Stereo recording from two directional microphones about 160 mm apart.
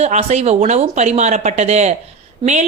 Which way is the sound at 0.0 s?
45° right (ahead or behind).